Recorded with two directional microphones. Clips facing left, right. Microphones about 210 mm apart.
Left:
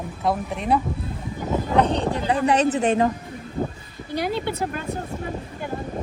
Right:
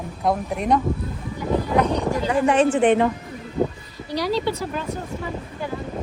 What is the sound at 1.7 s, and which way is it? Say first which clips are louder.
Speech: left 2 dB; 30° left (ahead or behind).